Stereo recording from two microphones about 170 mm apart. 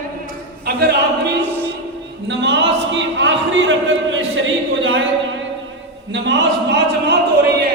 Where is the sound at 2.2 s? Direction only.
90° right.